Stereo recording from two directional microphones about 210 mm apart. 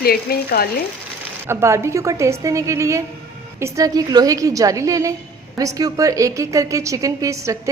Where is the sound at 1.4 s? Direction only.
15° right (ahead or behind).